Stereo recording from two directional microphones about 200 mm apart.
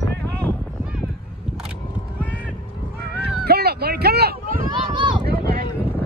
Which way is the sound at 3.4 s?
55° right (ahead or behind).